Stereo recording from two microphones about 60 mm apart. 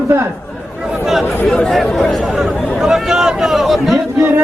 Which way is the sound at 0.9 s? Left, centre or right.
Centre.